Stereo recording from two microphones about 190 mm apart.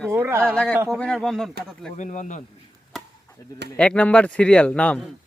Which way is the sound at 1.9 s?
40° left (ahead or behind).